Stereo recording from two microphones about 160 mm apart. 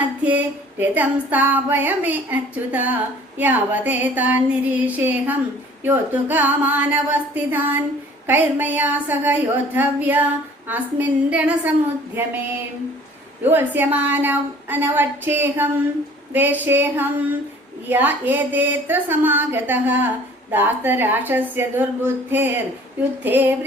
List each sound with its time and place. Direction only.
0.3 s female singing: 10° right (ahead or behind)
13.4 s female singing: 10° right (ahead or behind)